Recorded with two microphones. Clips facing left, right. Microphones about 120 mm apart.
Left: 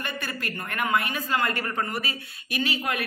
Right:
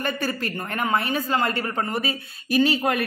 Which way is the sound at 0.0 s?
35° right (ahead or behind).